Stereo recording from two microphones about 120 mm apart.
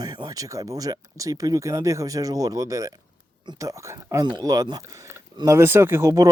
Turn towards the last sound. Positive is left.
turn(degrees=-25)  # may be behind; listen again after turning